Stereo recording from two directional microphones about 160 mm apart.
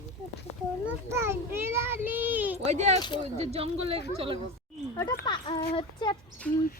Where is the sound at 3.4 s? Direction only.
40° right (ahead or behind).